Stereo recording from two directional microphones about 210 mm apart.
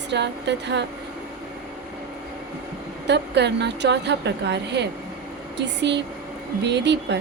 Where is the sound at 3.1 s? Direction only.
55° right (ahead or behind).